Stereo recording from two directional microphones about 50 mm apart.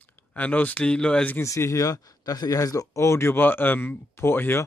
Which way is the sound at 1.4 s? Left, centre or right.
Left.